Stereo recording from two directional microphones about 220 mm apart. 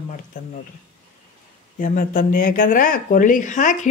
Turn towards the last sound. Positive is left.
turn(degrees=35)  # may be behind; listen again after turning